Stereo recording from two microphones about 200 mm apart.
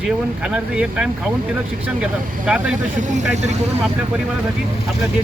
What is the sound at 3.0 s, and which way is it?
Speech, 35° right (ahead or behind).